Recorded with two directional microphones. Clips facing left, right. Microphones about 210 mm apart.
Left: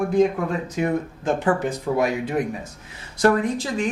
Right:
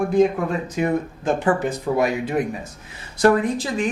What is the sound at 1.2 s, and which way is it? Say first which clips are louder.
Speech: right 1 dB; 15° right (ahead or behind).